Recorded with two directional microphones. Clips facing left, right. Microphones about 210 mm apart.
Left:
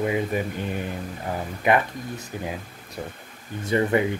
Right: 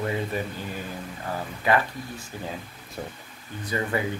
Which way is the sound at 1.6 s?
20° left (ahead or behind).